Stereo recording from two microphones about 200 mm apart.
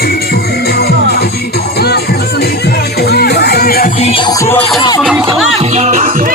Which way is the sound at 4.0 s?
30° left (ahead or behind).